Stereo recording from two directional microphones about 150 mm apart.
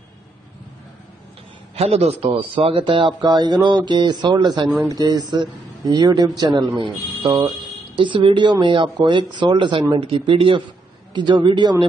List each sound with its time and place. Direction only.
1.8 s speech: 45° right (ahead or behind)